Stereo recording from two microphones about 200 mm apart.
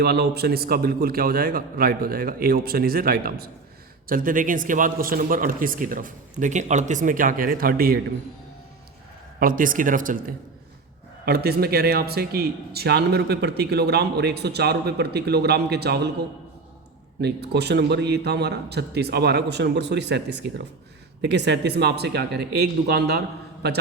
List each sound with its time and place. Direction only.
0.0 s speech: 55° right (ahead or behind)
9.4 s speech: 45° right (ahead or behind)
17.2 s a man's voice: 55° right (ahead or behind)